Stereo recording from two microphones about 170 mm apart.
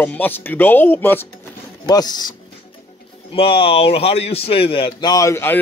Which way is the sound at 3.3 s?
35° left (ahead or behind).